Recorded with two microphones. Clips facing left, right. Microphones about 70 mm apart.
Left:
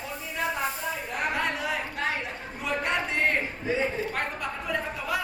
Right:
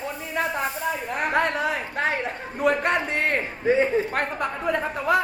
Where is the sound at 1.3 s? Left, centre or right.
Right.